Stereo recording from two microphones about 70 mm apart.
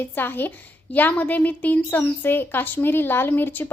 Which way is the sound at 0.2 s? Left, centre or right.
Left.